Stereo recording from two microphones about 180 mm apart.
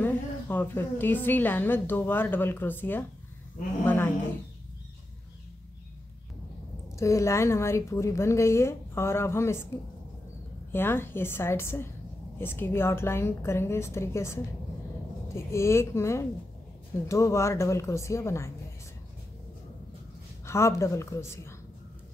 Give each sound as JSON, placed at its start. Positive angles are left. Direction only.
{"t": 0.0, "sound": "a woman's voice", "side_deg": 10}
{"t": 7.0, "sound": "a woman's voice", "side_deg": 15}
{"t": 10.7, "sound": "a woman's voice", "side_deg": 10}
{"t": 20.4, "sound": "a woman's voice", "side_deg": 15}